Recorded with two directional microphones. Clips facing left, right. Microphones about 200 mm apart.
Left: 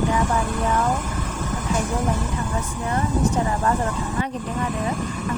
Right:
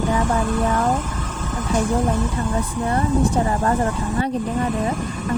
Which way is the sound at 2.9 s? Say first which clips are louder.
Right 2 dB; 35° right (ahead or behind).